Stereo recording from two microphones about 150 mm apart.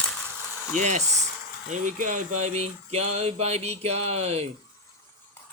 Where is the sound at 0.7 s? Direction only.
55° right (ahead or behind).